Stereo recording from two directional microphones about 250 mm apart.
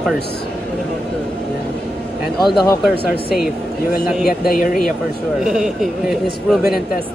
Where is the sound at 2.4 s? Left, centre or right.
Centre.